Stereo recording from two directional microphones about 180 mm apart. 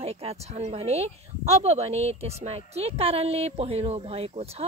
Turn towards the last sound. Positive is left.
turn(degrees=-35)  # may be behind; listen again after turning